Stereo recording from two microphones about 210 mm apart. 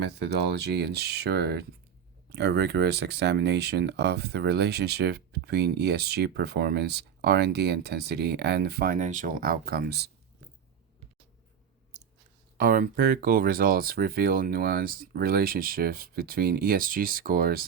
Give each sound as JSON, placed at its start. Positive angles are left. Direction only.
{"t": 0.0, "sound": "speech", "side_deg": -50}
{"t": 11.9, "sound": "clicking", "side_deg": -35}
{"t": 12.5, "sound": "speech", "side_deg": -40}